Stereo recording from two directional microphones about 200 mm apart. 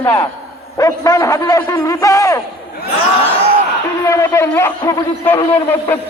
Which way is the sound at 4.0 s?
15° left (ahead or behind).